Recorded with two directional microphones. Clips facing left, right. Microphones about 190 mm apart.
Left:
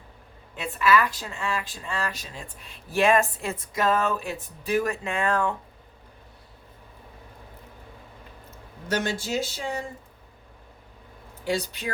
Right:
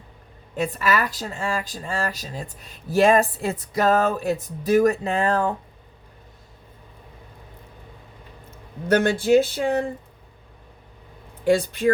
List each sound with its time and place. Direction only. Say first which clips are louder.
0.5 s speech: even; 40° right (ahead or behind)
8.4 s speech: right 9 dB; 55° right (ahead or behind)
11.4 s speech: right 9 dB; 55° right (ahead or behind)